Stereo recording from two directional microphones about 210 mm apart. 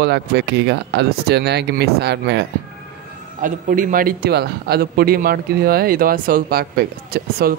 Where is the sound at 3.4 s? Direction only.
40° right (ahead or behind).